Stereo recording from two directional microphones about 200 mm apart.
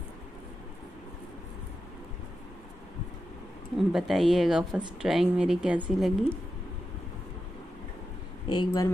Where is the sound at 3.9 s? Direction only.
Centre (ahead or behind).